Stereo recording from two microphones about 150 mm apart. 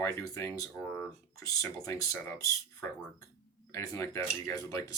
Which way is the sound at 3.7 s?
20° left (ahead or behind).